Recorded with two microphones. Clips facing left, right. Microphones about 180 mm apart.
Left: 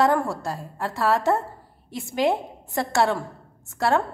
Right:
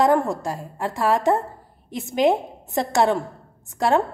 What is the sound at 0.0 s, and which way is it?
A woman's voice, 20° right (ahead or behind).